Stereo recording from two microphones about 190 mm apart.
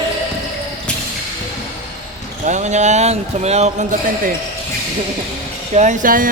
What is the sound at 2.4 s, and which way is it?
A man's voice, 40° right (ahead or behind).